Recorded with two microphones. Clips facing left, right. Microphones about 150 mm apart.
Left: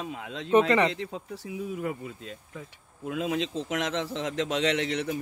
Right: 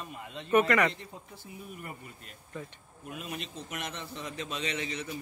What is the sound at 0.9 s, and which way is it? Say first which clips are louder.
A man's voice: left 11 dB; 90° left.